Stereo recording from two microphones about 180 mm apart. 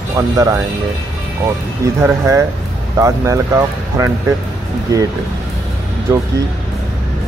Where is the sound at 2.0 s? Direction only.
15° right (ahead or behind).